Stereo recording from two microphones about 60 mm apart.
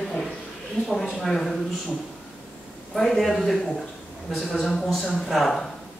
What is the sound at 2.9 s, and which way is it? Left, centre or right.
A man's voice, centre.